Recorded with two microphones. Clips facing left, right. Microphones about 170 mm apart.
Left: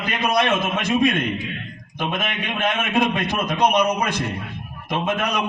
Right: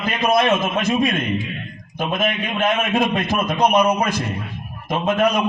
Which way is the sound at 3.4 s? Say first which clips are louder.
Right 2 dB; 30° right (ahead or behind).